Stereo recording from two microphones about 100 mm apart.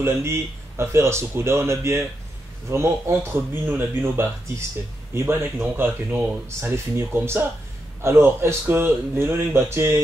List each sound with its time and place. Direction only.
0.0 s speech: 25° right (ahead or behind)